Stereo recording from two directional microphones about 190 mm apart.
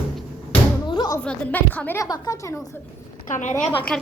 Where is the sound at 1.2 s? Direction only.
10° left (ahead or behind).